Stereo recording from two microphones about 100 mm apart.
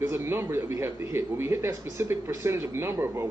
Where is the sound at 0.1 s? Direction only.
25° right (ahead or behind).